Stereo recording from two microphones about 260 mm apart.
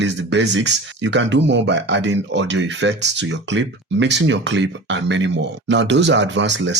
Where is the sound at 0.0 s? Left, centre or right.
Right.